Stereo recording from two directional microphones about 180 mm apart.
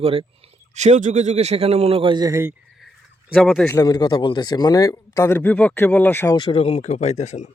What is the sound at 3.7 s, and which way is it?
A man's voice, 20° left (ahead or behind).